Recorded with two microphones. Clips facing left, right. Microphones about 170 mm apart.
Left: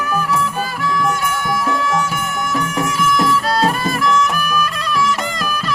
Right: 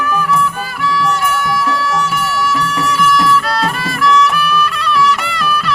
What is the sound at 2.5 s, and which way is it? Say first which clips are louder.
Music: right 3 dB; 45° left (ahead or behind).